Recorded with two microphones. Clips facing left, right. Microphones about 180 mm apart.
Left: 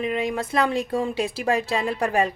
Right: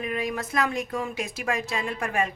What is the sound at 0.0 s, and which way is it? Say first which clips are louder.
A woman's voice: left 4 dB; 25° left (ahead or behind).